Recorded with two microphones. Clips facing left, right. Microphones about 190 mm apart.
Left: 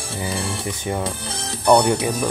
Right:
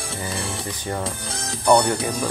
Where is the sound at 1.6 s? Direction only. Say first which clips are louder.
Left 2 dB; 15° left (ahead or behind).